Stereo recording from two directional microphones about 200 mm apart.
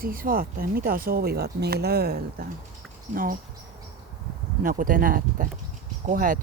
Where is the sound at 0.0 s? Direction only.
45° right (ahead or behind).